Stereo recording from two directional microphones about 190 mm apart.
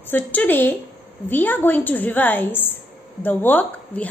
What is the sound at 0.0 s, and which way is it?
A woman's voice, 10° left (ahead or behind).